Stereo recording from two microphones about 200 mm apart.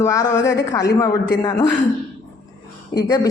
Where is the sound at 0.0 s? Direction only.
15° left (ahead or behind).